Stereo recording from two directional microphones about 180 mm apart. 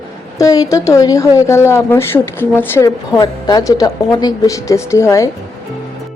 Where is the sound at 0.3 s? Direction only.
20° left (ahead or behind).